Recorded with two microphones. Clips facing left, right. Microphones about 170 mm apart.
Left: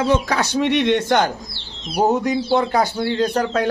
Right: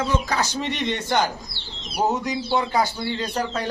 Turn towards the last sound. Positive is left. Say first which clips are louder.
# left 7 dB
turn(degrees=55)  # may be behind; listen again after turning